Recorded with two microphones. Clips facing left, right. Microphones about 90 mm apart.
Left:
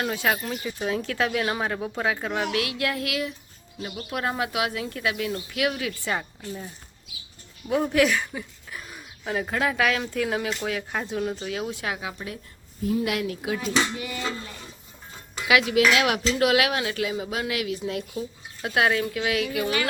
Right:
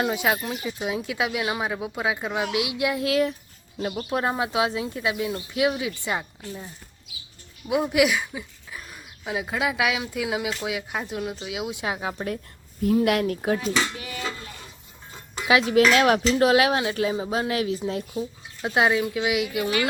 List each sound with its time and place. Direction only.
0.0 s speech: 15° right (ahead or behind)
3.1 s speech: 40° right (ahead or behind); by 6.7 s 15° right (ahead or behind)
7.7 s speech: 10° right (ahead or behind)
12.1 s speech: 50° right (ahead or behind)
15.4 s speech: 30° right (ahead or behind)